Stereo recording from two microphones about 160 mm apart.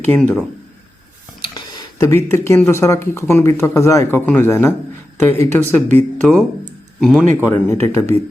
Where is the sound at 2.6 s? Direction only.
15° left (ahead or behind); by 7.3 s centre (ahead or behind).